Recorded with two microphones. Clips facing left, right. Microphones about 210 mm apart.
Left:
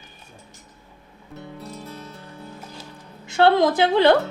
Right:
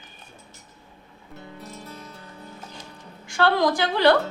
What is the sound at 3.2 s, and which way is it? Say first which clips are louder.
Speech: left 4 dB; 20° left (ahead or behind).